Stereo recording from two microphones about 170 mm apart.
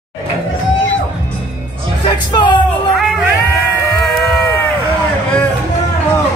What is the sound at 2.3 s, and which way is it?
Music, 30° left (ahead or behind).